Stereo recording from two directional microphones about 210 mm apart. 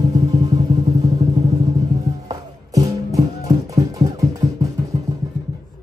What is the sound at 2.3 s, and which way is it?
Music, 15° right (ahead or behind).